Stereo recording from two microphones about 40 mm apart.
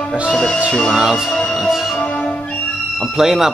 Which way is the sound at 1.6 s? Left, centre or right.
Centre.